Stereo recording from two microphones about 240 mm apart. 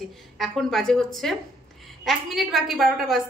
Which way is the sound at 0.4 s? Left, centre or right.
Centre.